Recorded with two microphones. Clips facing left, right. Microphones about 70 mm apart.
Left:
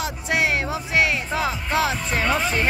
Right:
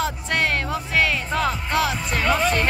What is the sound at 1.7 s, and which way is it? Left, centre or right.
Music, left.